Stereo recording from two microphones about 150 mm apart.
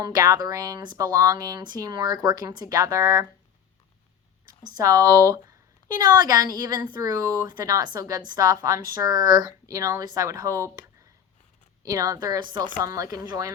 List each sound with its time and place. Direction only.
0.0 s a woman's voice: 25° right (ahead or behind)
4.4 s a woman's voice: 25° right (ahead or behind)